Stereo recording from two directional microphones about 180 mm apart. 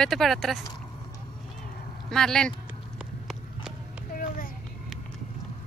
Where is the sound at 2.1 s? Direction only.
5° left (ahead or behind).